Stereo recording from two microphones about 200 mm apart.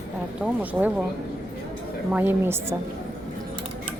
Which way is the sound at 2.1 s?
10° right (ahead or behind).